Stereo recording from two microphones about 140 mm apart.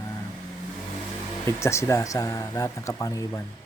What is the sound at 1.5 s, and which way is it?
Speech, 20° left (ahead or behind).